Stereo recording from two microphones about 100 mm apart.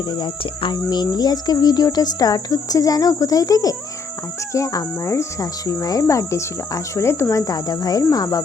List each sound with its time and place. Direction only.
0.0 s speech: 50° left (ahead or behind); by 8.4 s 35° left (ahead or behind)